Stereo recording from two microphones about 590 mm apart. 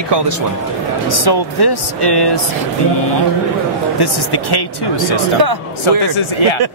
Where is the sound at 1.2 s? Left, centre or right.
Left.